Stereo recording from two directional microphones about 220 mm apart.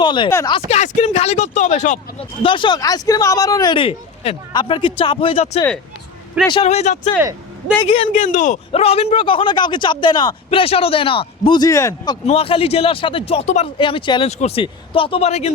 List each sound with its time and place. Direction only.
0.0 s speech: 20° left (ahead or behind)
0.7 s speech: 30° left (ahead or behind); by 12.1 s 15° left (ahead or behind)
12.2 s speech: 25° left (ahead or behind)